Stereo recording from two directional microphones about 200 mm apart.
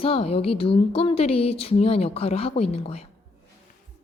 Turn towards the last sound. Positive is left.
turn(degrees=30)  # may be behind; listen again after turning